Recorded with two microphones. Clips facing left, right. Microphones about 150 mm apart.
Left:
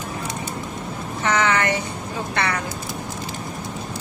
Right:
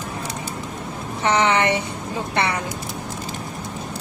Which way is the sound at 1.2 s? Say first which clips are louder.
Right 2 dB; 30° right (ahead or behind).